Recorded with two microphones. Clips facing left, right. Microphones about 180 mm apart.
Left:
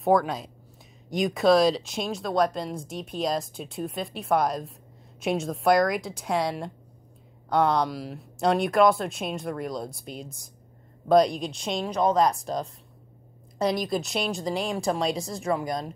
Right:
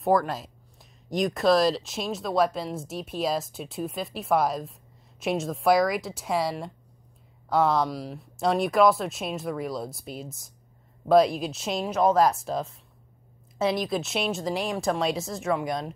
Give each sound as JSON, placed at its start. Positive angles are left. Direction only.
{"t": 0.0, "sound": "speech", "side_deg": 0}